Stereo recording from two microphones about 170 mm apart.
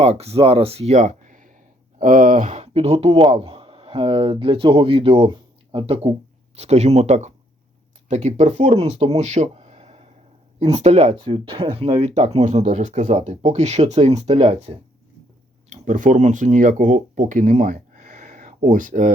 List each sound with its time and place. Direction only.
0.0 s speech: 40° right (ahead or behind)
11.2 s speech: 30° right (ahead or behind)
15.7 s speech: 45° right (ahead or behind)